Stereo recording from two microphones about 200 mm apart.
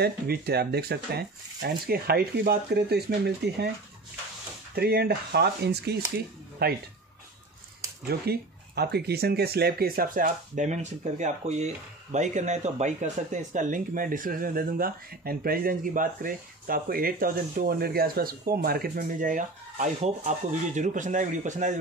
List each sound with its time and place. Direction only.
0.0 s speech: 50° right (ahead or behind)
4.7 s speech: 50° right (ahead or behind)
8.1 s speech: 55° right (ahead or behind)